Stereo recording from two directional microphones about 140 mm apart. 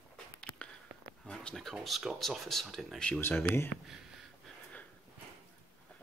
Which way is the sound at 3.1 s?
15° left (ahead or behind).